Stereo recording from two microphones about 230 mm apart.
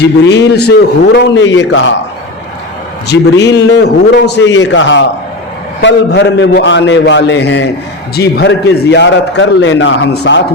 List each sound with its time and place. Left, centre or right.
0.0 s a man's voice: left
3.1 s a man's voice: left